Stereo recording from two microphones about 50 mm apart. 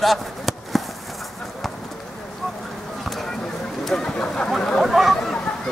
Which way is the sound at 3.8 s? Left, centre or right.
Centre.